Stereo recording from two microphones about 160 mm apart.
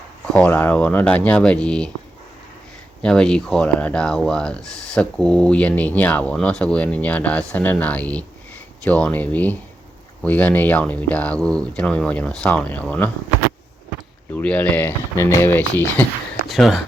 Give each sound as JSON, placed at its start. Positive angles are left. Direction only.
{"t": 0.3, "sound": "speech", "side_deg": 10}
{"t": 3.0, "sound": "speech", "side_deg": 5}
{"t": 14.3, "sound": "speech", "side_deg": 10}